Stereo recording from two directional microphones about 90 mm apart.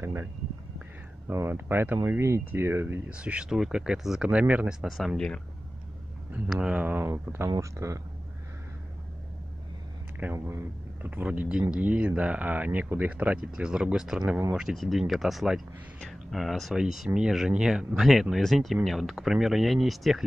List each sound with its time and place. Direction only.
0.0 s speech: 30° right (ahead or behind)
0.7 s a sound: 25° right (ahead or behind)
2.0 s speech: 30° right (ahead or behind)
3.1 s speech: 15° right (ahead or behind)
4.8 s speech: centre (ahead or behind)
6.6 s speech: 15° right (ahead or behind)
7.4 s speech: 40° right (ahead or behind)
10.3 s speech: 30° right (ahead or behind)
11.0 s speech: 20° right (ahead or behind); by 20.2 s centre (ahead or behind)